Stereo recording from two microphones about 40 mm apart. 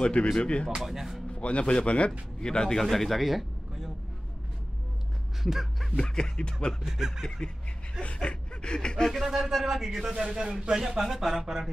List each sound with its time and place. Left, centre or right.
0.0 s music: left
0.4 s speech: left
0.8 s speech: centre
1.3 s speech: left
2.4 s music: centre
2.8 s speech: centre
5.4 s music: centre
5.9 s music: centre
6.9 s speech: centre
7.2 s music: centre
8.0 s a sound: left
9.1 s speech: centre
10.1 s speech: centre